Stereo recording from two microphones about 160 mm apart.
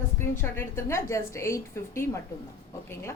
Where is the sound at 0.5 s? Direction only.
15° left (ahead or behind).